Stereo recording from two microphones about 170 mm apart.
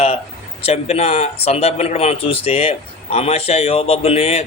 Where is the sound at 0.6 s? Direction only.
40° left (ahead or behind).